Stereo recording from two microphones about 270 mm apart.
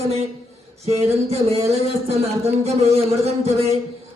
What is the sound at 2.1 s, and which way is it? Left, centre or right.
Speech, right.